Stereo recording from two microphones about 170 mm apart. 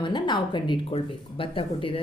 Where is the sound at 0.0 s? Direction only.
25° left (ahead or behind).